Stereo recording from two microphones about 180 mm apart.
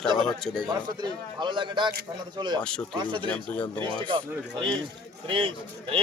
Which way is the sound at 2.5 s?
5° left (ahead or behind).